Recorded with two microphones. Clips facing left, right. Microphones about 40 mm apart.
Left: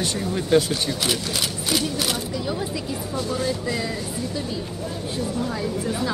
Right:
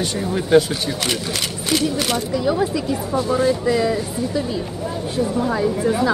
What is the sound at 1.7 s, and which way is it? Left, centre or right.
A man's voice, centre.